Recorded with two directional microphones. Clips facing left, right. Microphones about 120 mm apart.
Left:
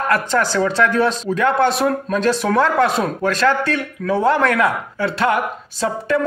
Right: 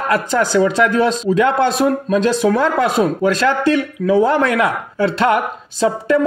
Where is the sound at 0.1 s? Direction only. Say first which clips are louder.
Right 4 dB; 20° right (ahead or behind).